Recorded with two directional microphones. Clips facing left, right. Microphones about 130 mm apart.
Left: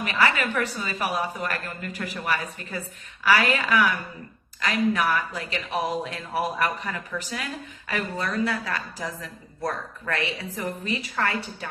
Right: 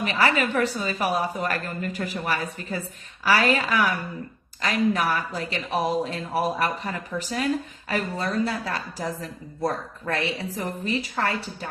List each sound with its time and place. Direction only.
0.0 s a woman's voice: 35° right (ahead or behind)